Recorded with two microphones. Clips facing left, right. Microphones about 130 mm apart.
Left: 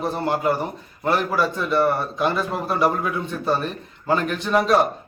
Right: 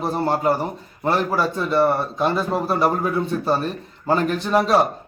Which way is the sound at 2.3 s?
35° right (ahead or behind).